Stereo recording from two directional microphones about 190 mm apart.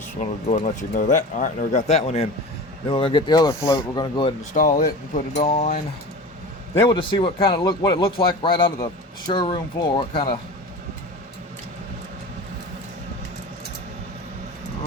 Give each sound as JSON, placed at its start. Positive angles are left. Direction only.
{"t": 0.2, "sound": "speech", "side_deg": 40}
{"t": 4.5, "sound": "speech", "side_deg": 45}
{"t": 6.8, "sound": "speech", "side_deg": 25}